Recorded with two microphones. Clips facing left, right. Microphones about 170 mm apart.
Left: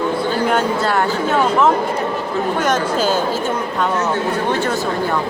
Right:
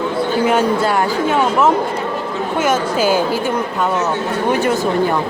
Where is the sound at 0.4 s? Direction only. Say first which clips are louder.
Right 3 dB; 10° right (ahead or behind).